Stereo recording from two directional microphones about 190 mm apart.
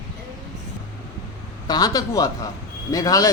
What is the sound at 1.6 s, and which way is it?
Speech, 20° left (ahead or behind).